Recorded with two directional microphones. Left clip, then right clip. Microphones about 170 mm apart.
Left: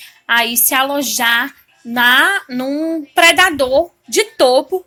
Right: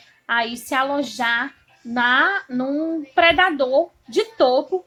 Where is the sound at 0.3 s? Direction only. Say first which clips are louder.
Left 7 dB; 25° left (ahead or behind).